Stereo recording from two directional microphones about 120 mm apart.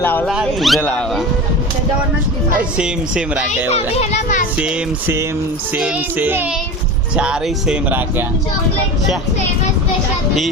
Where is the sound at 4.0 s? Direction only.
70° left (ahead or behind).